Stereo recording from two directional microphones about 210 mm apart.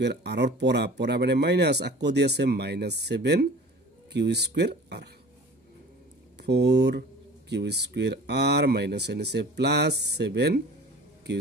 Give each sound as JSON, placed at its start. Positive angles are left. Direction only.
{"t": 0.0, "sound": "speech", "side_deg": -55}
{"t": 6.4, "sound": "speech", "side_deg": -55}